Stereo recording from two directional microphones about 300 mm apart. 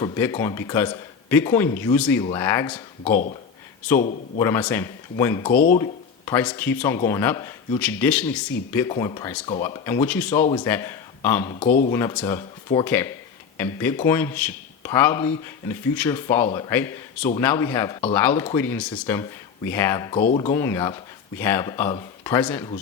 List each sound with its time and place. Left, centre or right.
0.0 s a man's voice: centre
4.4 s a man's voice: centre
5.5 s speech: left
5.8 s a man's voice: centre
11.6 s speech: left
11.9 s a man's voice: centre
20.2 s speech: left
20.5 s a man's voice: centre